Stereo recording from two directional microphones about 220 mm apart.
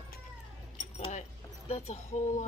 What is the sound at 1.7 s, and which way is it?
Speech, 30° left (ahead or behind).